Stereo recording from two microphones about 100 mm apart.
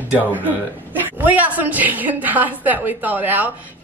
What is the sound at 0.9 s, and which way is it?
A woman's voice, 15° right (ahead or behind).